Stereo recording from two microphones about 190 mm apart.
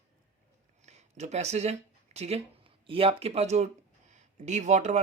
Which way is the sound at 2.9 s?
30° right (ahead or behind).